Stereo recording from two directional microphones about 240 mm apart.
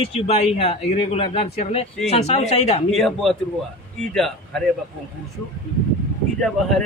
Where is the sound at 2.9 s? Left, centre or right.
Centre.